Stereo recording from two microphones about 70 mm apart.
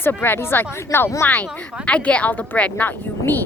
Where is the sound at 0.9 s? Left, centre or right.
Left.